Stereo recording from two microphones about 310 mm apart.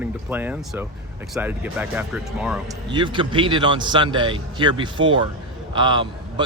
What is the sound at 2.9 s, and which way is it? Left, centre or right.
A man's voice, centre.